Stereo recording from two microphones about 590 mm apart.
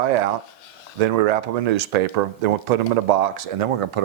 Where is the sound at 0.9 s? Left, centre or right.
Right.